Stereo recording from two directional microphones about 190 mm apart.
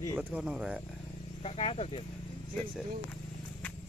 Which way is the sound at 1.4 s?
30° left (ahead or behind).